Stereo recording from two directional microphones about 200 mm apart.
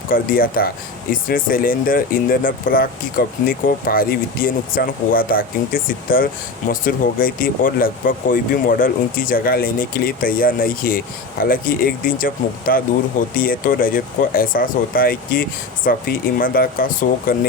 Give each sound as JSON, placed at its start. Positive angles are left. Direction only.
{"t": 0.1, "sound": "speech", "side_deg": 45}